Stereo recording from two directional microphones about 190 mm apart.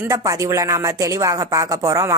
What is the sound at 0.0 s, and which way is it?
Speech, 15° right (ahead or behind).